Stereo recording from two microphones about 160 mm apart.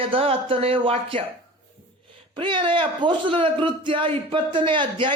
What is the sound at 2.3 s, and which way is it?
Speech, 30° right (ahead or behind).